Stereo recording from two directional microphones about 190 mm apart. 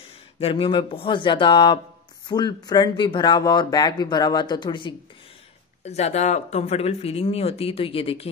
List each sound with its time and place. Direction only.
0.4 s speech: 30° left (ahead or behind)
5.9 s speech: 35° left (ahead or behind)